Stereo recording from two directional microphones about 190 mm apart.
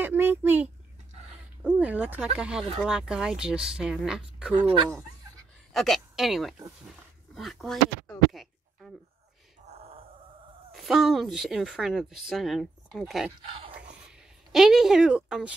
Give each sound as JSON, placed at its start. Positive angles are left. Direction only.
{"t": 0.0, "sound": "a sound", "side_deg": -10}
{"t": 1.6, "sound": "speech", "side_deg": -5}
{"t": 5.7, "sound": "speech", "side_deg": 0}
{"t": 9.7, "sound": "a sound", "side_deg": -30}
{"t": 10.7, "sound": "speech", "side_deg": 0}
{"t": 14.5, "sound": "speech", "side_deg": 0}